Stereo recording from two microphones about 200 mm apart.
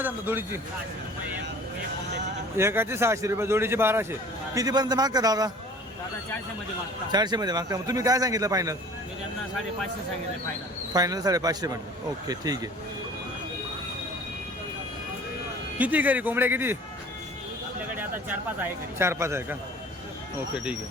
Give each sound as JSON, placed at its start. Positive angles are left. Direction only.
{"t": 0.0, "sound": "speech", "side_deg": -10}
{"t": 2.6, "sound": "a man's voice", "side_deg": -15}
{"t": 7.1, "sound": "a man's voice", "side_deg": -20}
{"t": 10.9, "sound": "a man's voice", "side_deg": -20}
{"t": 15.8, "sound": "a man's voice", "side_deg": -10}
{"t": 17.9, "sound": "a man's voice", "side_deg": -10}